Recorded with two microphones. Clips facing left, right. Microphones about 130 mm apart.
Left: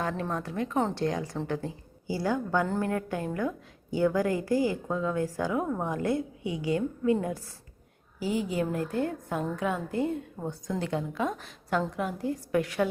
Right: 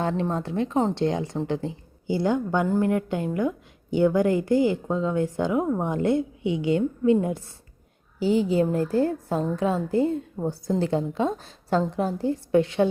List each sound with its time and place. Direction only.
0.0 s a woman's voice: 25° right (ahead or behind)